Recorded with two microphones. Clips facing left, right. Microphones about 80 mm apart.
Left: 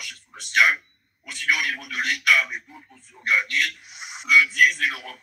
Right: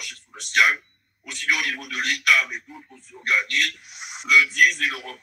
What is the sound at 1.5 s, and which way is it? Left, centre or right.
A man's voice, left.